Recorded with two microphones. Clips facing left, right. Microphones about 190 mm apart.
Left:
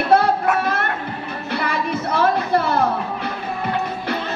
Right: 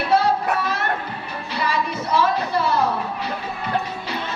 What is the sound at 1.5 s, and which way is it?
Music, 55° left (ahead or behind).